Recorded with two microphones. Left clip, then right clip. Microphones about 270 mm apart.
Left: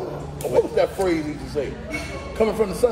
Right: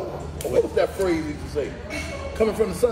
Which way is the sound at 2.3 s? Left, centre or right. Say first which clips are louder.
Left 1 dB; centre.